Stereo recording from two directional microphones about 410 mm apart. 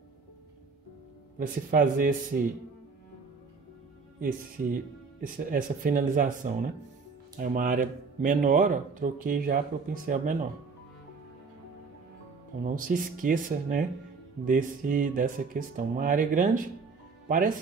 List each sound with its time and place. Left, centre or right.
1.4 s speech: centre
4.2 s speech: centre
12.6 s speech: centre